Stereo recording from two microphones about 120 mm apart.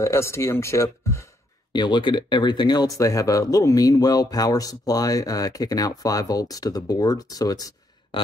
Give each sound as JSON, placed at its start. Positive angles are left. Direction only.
{"t": 0.0, "sound": "speech", "side_deg": 25}
{"t": 1.7, "sound": "speech", "side_deg": 40}
{"t": 8.1, "sound": "a sound", "side_deg": 45}